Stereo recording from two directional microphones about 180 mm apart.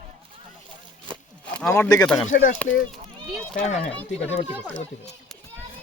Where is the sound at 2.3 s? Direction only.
45° left (ahead or behind).